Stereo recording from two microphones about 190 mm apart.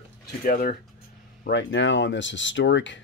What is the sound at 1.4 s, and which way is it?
Speech, 70° left (ahead or behind).